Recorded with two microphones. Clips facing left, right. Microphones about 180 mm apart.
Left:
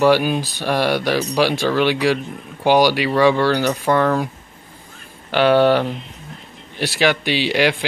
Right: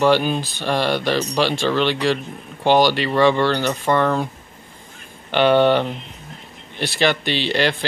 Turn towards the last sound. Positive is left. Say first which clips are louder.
# left 2 dB
turn(degrees=10)  # may be behind; listen again after turning